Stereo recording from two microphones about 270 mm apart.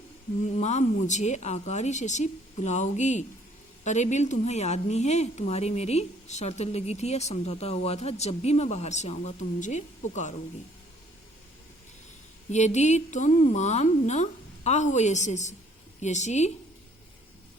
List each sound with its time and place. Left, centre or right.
0.5 s a woman's voice: left
12.5 s a woman's voice: left